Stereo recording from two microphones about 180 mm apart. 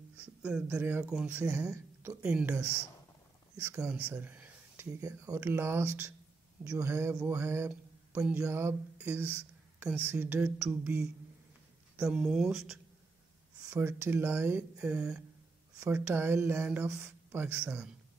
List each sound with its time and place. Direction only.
0.2 s speech: 5° right (ahead or behind)
12.1 s speech: centre (ahead or behind)
13.7 s speech: 15° right (ahead or behind)